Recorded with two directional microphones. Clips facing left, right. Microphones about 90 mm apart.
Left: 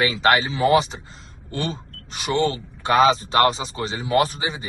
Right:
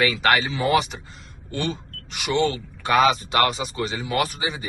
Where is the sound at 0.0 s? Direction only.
25° left (ahead or behind).